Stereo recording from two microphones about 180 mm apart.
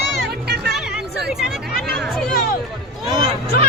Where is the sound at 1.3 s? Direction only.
Centre (ahead or behind).